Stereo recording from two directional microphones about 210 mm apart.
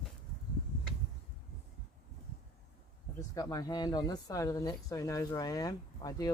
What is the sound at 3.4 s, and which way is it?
Speech, 15° left (ahead or behind).